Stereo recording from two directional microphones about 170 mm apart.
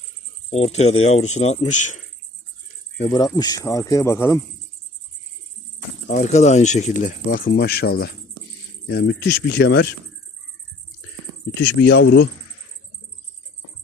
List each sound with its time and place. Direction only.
0.5 s speech: 40° left (ahead or behind)
3.2 s speech: 25° left (ahead or behind)
6.1 s speech: 45° left (ahead or behind); by 9.9 s 65° left (ahead or behind)
11.6 s speech: 85° left